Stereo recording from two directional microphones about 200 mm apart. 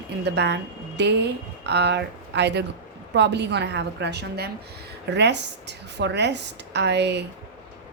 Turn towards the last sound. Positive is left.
turn(degrees=-60)  # may be behind; listen again after turning